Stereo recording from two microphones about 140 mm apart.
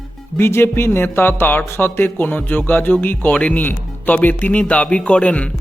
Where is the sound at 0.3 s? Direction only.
15° left (ahead or behind).